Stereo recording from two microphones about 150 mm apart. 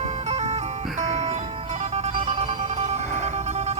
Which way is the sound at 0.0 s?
50° right (ahead or behind).